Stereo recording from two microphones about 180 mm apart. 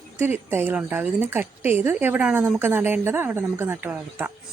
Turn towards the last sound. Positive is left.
turn(degrees=-10)  # may be behind; listen again after turning